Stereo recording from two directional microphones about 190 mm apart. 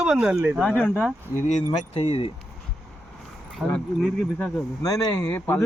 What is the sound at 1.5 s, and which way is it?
Speech, 35° left (ahead or behind).